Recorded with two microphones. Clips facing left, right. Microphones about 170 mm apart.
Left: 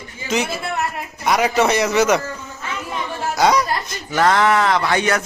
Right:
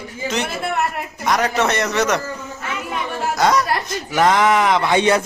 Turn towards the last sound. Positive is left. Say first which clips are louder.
# right 3 dB
turn(degrees=-25)  # may be behind; listen again after turning